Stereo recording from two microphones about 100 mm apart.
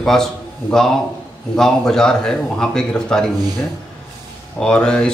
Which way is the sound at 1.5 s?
5° left (ahead or behind).